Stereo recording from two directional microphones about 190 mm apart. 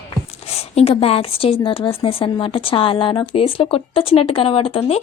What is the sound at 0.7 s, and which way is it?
Speech, 30° left (ahead or behind).